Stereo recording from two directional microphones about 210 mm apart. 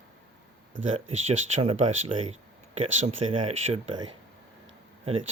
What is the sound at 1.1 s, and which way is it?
Speech, 30° right (ahead or behind).